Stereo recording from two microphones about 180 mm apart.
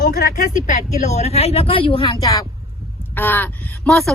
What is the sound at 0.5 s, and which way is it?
Speech, 40° left (ahead or behind).